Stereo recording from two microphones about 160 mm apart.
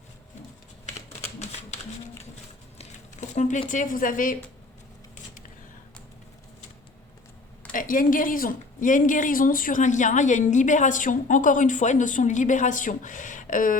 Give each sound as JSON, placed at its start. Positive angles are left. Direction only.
{"t": 2.7, "sound": "a sound", "side_deg": 50}
{"t": 3.7, "sound": "a woman's voice", "side_deg": 55}
{"t": 7.7, "sound": "a woman's voice", "side_deg": 60}